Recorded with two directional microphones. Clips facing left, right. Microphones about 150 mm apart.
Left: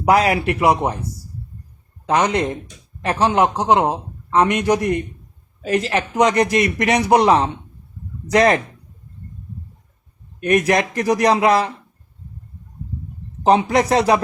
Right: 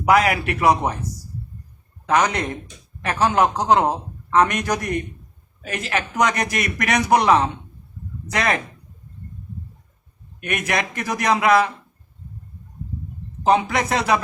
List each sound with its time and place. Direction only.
0.0 s speech: 30° left (ahead or behind)
2.0 s a man's voice: 25° left (ahead or behind)
10.4 s a man's voice: 35° left (ahead or behind)
13.4 s a man's voice: 35° left (ahead or behind)